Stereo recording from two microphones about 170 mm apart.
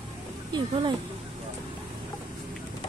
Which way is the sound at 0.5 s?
30° right (ahead or behind).